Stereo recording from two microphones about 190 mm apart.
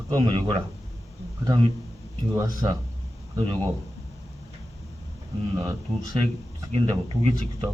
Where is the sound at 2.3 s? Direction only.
20° right (ahead or behind).